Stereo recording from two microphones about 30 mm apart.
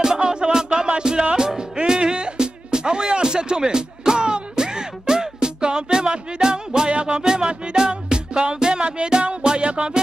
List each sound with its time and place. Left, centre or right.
0.0 s music: right